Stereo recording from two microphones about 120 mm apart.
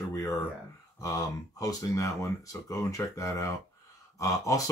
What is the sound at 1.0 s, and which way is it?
Speech, 30° left (ahead or behind).